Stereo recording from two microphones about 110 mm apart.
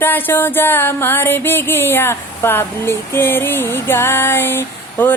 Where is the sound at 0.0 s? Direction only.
20° left (ahead or behind).